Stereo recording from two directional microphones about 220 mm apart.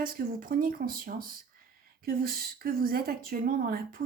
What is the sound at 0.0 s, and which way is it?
A woman's voice, 40° right (ahead or behind).